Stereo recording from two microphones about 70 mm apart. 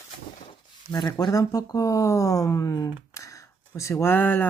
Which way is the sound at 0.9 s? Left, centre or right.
Left.